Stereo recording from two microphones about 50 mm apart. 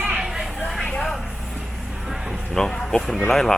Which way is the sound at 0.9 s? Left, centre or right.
Centre.